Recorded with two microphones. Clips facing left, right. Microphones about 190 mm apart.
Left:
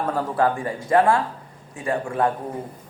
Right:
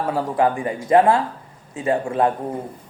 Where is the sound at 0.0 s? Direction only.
10° right (ahead or behind).